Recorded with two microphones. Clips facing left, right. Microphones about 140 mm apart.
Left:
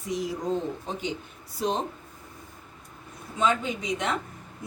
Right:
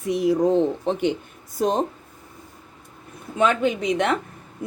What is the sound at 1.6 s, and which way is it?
Speech, 45° right (ahead or behind).